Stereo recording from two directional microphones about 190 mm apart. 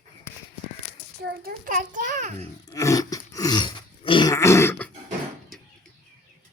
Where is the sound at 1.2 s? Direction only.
50° right (ahead or behind).